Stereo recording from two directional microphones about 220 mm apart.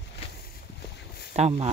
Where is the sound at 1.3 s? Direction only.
30° right (ahead or behind).